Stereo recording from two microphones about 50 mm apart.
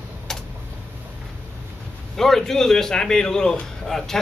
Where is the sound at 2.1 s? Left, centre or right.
Centre.